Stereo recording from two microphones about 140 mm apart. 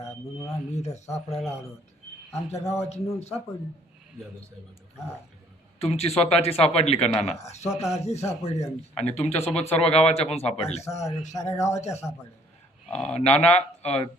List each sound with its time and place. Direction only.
0.5 s speech: 50° left (ahead or behind)
5.8 s speech: 45° left (ahead or behind)
11.9 s speech: 20° left (ahead or behind)
13.1 s speech: 50° left (ahead or behind)